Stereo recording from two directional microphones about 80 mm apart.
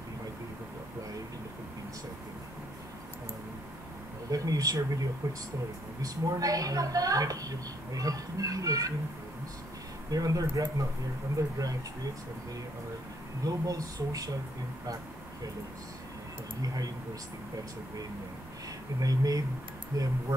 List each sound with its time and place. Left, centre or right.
4.3 s a woman's voice: right
10.1 s a woman's voice: right
13.4 s a woman's voice: right
16.6 s a woman's voice: right
18.9 s a woman's voice: right